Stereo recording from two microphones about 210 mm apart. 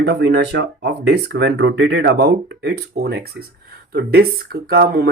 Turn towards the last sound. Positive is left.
turn(degrees=-45)  # may be behind; listen again after turning